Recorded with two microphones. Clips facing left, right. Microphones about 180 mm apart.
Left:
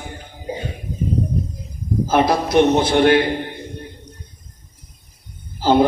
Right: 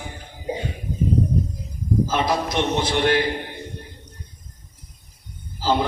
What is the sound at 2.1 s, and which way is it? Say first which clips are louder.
Mantra: left 11 dB; 60° left (ahead or behind).